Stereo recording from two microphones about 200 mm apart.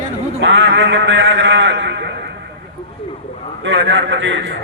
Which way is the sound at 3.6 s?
70° right (ahead or behind).